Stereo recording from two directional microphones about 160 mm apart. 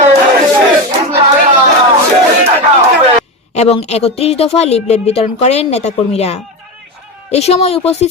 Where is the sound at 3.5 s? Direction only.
40° left (ahead or behind).